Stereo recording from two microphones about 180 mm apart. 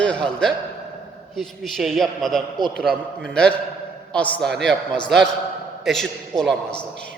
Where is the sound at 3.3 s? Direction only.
5° left (ahead or behind).